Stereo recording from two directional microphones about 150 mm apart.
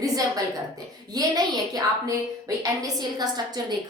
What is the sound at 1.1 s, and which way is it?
A woman's voice, 25° right (ahead or behind).